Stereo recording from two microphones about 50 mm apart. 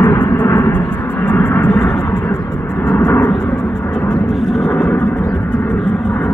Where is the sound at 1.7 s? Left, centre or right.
Left.